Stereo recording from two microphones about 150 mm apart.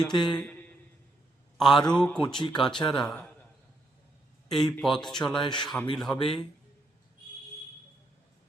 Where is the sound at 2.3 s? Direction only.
30° left (ahead or behind).